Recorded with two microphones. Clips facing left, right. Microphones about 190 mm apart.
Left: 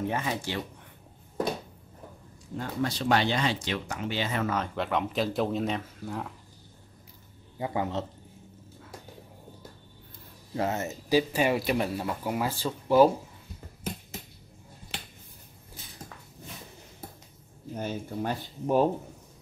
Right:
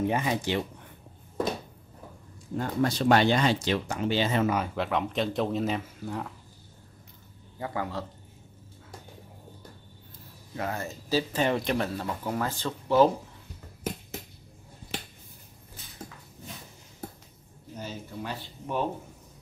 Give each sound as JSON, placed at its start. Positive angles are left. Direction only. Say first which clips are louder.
{"t": 0.1, "sound": "speech", "louder": "right 4 dB", "side_deg": -15}
{"t": 2.6, "sound": "speech", "louder": "right 4 dB", "side_deg": -50}
{"t": 4.7, "sound": "speech", "louder": "even", "side_deg": 0}
{"t": 7.5, "sound": "a man's voice", "louder": "left 3 dB", "side_deg": 20}
{"t": 10.5, "sound": "speech", "louder": "left 4 dB", "side_deg": 25}
{"t": 17.7, "sound": "speech", "louder": "left 5 dB", "side_deg": 50}